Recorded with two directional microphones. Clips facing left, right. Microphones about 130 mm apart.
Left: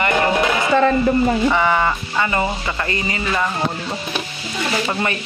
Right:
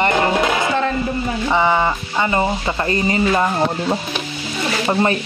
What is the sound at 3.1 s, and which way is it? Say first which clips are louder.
Speech: right 6 dB; 30° right (ahead or behind).